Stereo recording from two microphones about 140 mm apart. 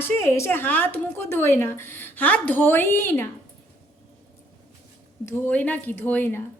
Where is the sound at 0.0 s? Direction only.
20° left (ahead or behind).